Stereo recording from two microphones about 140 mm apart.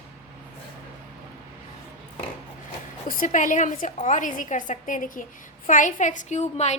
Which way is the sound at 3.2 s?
65° left (ahead or behind).